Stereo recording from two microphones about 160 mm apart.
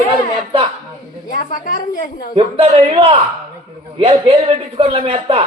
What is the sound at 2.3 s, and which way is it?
A man's voice, 35° right (ahead or behind).